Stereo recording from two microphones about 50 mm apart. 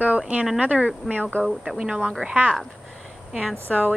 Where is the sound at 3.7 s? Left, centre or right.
Centre.